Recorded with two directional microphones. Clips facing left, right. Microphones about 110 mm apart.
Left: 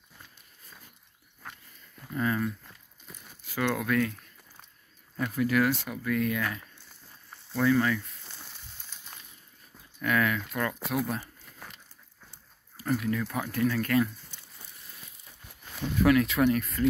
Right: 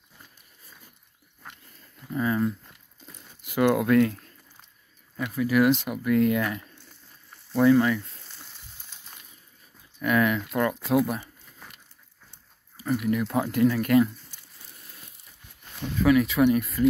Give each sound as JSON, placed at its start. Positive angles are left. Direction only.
{"t": 2.1, "sound": "speech", "side_deg": -15}
{"t": 5.1, "sound": "speech", "side_deg": -5}
{"t": 5.6, "sound": "speech", "side_deg": -20}
{"t": 10.0, "sound": "speech", "side_deg": -20}
{"t": 12.8, "sound": "speech", "side_deg": -5}
{"t": 13.1, "sound": "speech", "side_deg": -20}
{"t": 16.1, "sound": "speech", "side_deg": -5}